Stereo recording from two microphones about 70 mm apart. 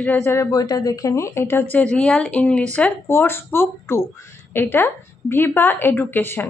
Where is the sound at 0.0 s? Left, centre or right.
Left.